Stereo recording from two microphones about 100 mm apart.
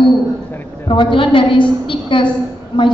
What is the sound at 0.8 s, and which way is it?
A woman's voice, 55° left (ahead or behind).